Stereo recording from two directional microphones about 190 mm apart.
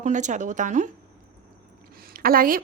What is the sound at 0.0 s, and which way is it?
Speech, 40° right (ahead or behind).